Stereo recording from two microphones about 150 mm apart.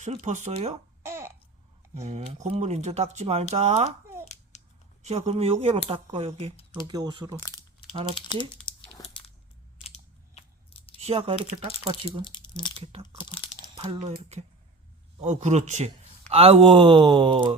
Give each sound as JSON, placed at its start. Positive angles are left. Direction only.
{"t": 0.0, "sound": "speech", "side_deg": -50}
{"t": 1.0, "sound": "a sound", "side_deg": -20}
{"t": 2.0, "sound": "speech", "side_deg": -45}
{"t": 4.5, "sound": "scissors", "side_deg": 50}
{"t": 5.0, "sound": "speech", "side_deg": -45}
{"t": 6.8, "sound": "speech", "side_deg": -25}
{"t": 7.3, "sound": "speech", "side_deg": 25}
{"t": 8.1, "sound": "crumpling", "side_deg": 30}
{"t": 9.7, "sound": "scissors", "side_deg": 45}
{"t": 11.0, "sound": "speech", "side_deg": -40}
{"t": 12.2, "sound": "speech", "side_deg": 30}
{"t": 12.7, "sound": "speech", "side_deg": -40}
{"t": 15.2, "sound": "speech", "side_deg": -50}